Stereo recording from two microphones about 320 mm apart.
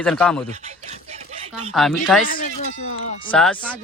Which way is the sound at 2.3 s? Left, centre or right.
Left.